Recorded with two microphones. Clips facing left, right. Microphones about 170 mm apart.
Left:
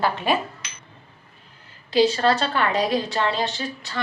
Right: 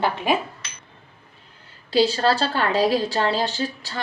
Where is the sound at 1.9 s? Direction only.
35° right (ahead or behind).